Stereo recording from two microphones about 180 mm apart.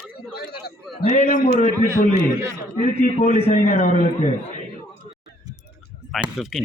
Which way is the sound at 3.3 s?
35° left (ahead or behind).